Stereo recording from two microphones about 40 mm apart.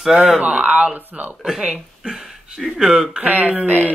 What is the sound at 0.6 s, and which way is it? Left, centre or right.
Speech, right.